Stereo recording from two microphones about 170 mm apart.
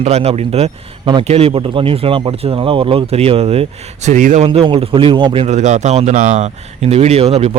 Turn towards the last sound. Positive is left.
turn(degrees=-35)  # may be behind; listen again after turning